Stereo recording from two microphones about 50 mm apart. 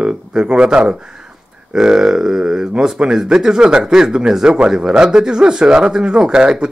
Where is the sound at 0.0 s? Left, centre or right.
Centre.